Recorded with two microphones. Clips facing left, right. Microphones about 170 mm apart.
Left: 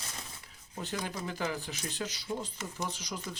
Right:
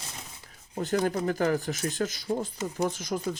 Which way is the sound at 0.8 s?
45° right (ahead or behind).